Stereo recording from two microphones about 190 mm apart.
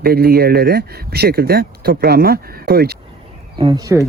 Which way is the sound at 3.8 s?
15° right (ahead or behind).